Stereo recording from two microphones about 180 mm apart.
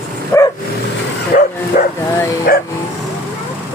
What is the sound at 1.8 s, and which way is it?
Speech, 50° left (ahead or behind).